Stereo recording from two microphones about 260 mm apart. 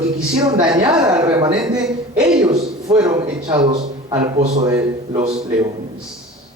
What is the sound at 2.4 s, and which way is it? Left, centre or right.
A man's voice, centre.